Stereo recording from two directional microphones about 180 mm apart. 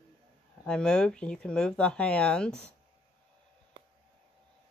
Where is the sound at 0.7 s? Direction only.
5° left (ahead or behind).